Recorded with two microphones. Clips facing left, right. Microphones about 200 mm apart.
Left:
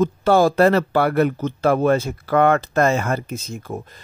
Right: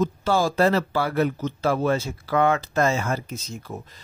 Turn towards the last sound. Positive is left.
turn(degrees=50)  # may be behind; listen again after turning